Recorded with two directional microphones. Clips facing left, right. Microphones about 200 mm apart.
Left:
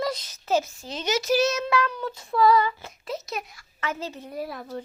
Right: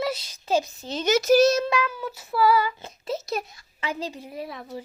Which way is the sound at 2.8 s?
25° right (ahead or behind).